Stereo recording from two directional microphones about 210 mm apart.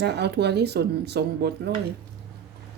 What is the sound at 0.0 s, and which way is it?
Speech, 50° right (ahead or behind).